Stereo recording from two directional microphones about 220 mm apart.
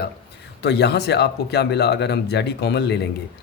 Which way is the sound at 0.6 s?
50° left (ahead or behind).